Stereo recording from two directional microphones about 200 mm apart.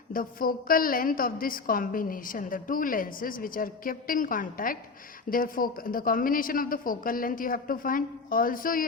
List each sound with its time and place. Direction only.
0.1 s a woman's voice: 45° left (ahead or behind)